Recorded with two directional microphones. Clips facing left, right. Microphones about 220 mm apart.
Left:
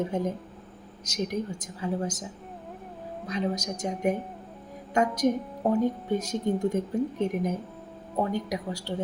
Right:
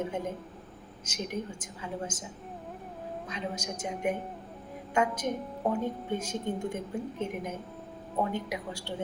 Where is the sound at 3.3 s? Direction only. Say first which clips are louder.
Left 9 dB; 40° left (ahead or behind).